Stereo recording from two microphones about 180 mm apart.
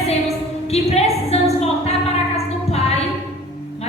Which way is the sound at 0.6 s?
35° left (ahead or behind).